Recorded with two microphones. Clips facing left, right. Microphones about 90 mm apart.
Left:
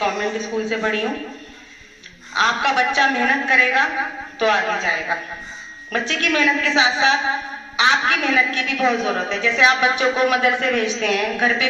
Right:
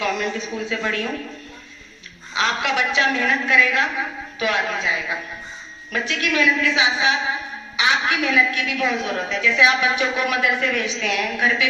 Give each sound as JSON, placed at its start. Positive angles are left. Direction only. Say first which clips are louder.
{"t": 0.0, "sound": "a woman's voice", "louder": "left 2 dB", "side_deg": 35}
{"t": 2.3, "sound": "a woman's voice", "louder": "left 3 dB", "side_deg": 30}